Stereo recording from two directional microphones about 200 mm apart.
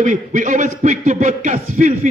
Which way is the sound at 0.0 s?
40° right (ahead or behind).